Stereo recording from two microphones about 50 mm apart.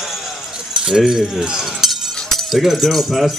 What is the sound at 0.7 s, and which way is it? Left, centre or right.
Speech, centre.